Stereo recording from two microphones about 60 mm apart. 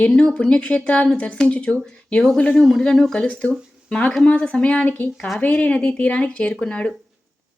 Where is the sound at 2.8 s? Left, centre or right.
Centre.